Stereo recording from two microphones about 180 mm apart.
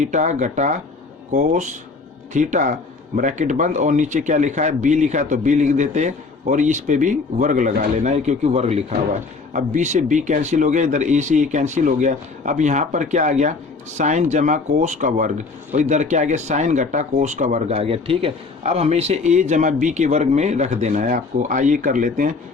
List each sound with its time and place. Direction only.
0.0 s a man's voice: 40° right (ahead or behind)